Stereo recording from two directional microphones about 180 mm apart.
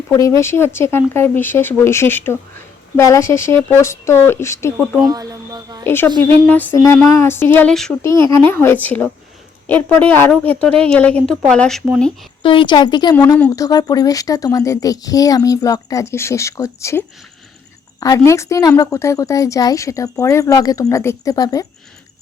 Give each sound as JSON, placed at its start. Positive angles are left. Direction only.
{"t": 0.1, "sound": "speech", "side_deg": 15}
{"t": 5.0, "sound": "a sound", "side_deg": -20}
{"t": 5.8, "sound": "a woman's voice", "side_deg": 10}
{"t": 8.0, "sound": "a woman's voice", "side_deg": 15}
{"t": 12.4, "sound": "speech", "side_deg": 25}
{"t": 18.0, "sound": "speech", "side_deg": 15}